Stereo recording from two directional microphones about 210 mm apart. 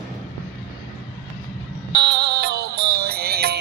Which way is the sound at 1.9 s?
50° right (ahead or behind).